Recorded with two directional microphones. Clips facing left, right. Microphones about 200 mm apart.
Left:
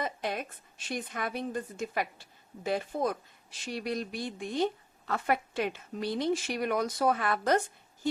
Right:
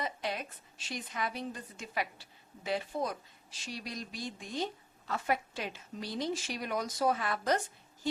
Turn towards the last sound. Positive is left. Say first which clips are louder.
# left 4 dB
turn(degrees=55)  # may be behind; listen again after turning